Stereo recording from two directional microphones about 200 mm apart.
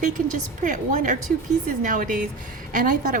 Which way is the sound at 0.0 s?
40° right (ahead or behind).